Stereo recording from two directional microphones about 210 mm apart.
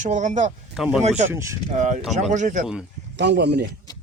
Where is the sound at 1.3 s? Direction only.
15° right (ahead or behind).